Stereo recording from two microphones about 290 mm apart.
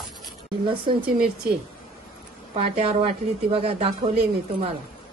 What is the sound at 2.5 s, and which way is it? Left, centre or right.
Speech, right.